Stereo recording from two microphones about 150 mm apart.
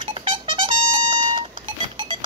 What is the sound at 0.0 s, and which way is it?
Music, 35° right (ahead or behind).